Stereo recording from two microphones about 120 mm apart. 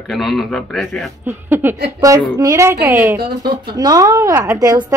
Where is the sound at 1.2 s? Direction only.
15° right (ahead or behind).